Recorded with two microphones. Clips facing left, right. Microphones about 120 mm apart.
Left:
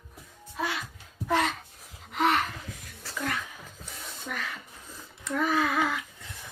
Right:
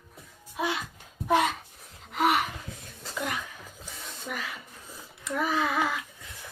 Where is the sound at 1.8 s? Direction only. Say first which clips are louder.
Even; centre (ahead or behind).